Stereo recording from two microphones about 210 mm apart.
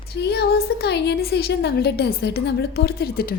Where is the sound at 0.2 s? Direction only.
50° left (ahead or behind).